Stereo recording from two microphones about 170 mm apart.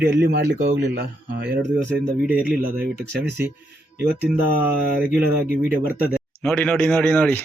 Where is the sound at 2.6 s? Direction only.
70° right (ahead or behind).